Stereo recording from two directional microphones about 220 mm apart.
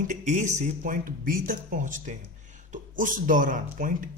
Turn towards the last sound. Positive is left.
turn(degrees=-35)  # may be behind; listen again after turning